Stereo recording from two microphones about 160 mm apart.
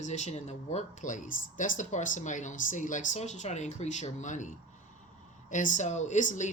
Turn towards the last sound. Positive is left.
turn(degrees=50)  # may be behind; listen again after turning